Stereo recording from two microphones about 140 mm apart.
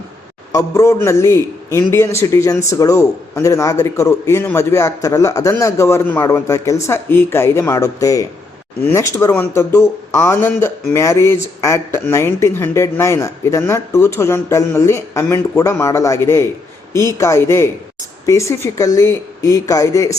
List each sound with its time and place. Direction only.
0.5 s a man's voice: 25° left (ahead or behind)